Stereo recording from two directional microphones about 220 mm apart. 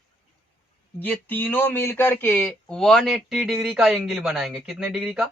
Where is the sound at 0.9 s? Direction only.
10° left (ahead or behind).